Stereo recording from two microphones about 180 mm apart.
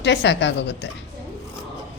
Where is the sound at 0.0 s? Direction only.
80° left.